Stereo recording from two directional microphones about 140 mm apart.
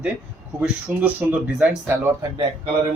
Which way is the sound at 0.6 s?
10° right (ahead or behind).